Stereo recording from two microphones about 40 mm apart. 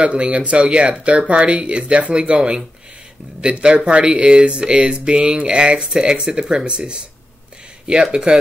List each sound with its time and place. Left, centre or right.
0.0 s speech: right